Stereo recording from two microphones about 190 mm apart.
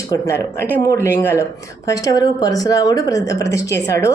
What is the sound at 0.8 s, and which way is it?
A woman's voice, 15° left (ahead or behind).